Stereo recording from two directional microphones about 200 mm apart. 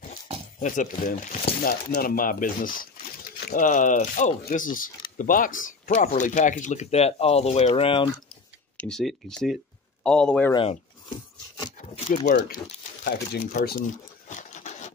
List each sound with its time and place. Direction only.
0.1 s speech: 40° left (ahead or behind)
8.7 s speech: 5° left (ahead or behind)
10.5 s speech: 25° left (ahead or behind)
11.8 s crumpling: 30° left (ahead or behind)
13.0 s a sound: 50° left (ahead or behind); by 14.9 s 35° left (ahead or behind)